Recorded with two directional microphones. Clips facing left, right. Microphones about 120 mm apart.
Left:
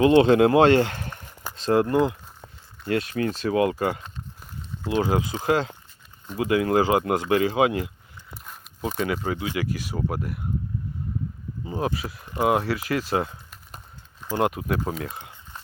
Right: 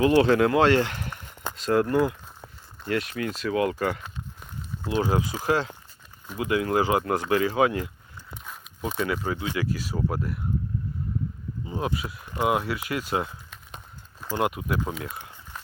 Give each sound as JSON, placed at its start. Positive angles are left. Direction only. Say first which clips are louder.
{"t": 0.0, "sound": "speech", "louder": "left 3 dB", "side_deg": 25}
{"t": 8.8, "sound": "speech", "louder": "left 1 dB", "side_deg": 35}
{"t": 9.7, "sound": "speech", "louder": "even", "side_deg": 15}
{"t": 11.6, "sound": "speech", "louder": "left 2 dB", "side_deg": 30}
{"t": 13.5, "sound": "a sound", "louder": "right 1 dB", "side_deg": 0}
{"t": 14.4, "sound": "speech", "louder": "left 2 dB", "side_deg": 30}